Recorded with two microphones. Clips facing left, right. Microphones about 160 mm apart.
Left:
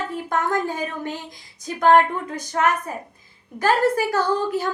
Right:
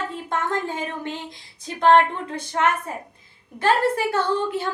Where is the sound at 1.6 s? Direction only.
25° right (ahead or behind).